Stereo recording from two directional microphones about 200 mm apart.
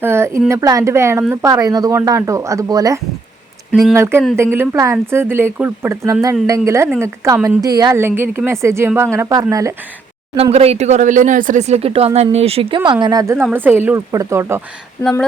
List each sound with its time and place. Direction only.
0.0 s a woman's voice: 10° right (ahead or behind)
3.7 s speech: centre (ahead or behind)
3.9 s a woman's voice: 15° right (ahead or behind)
10.3 s a woman's voice: 30° right (ahead or behind); by 14.6 s 15° right (ahead or behind)